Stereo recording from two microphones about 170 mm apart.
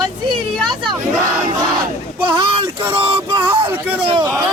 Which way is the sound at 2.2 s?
30° right (ahead or behind).